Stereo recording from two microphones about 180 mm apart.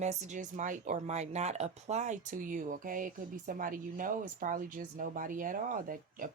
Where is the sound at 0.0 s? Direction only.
40° right (ahead or behind).